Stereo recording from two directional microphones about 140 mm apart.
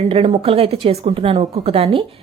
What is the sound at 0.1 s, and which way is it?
A woman's voice, 40° right (ahead or behind).